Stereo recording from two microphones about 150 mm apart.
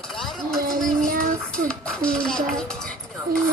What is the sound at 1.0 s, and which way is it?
Music, 60° right (ahead or behind).